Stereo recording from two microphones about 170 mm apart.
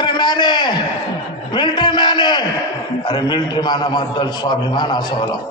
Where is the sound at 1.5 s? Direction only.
25° left (ahead or behind).